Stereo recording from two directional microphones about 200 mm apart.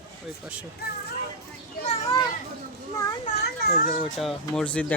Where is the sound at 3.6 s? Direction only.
50° left (ahead or behind).